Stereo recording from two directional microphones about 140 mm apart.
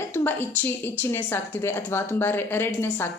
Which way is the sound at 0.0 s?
15° left (ahead or behind).